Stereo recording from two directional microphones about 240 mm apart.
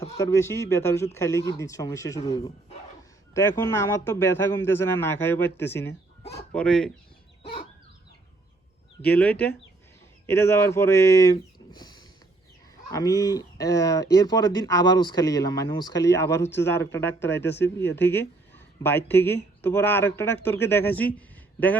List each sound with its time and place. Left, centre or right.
0.0 s speech: centre
9.0 s speech: centre
16.5 s speech: left
16.7 s speech: centre
17.3 s speech: left
18.1 s speech: centre
21.2 s a sound: centre